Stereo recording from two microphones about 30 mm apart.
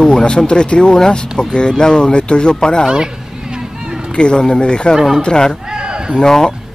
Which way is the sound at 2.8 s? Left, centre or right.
Right.